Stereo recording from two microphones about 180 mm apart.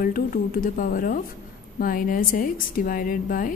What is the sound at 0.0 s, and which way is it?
A woman's voice, 50° left (ahead or behind).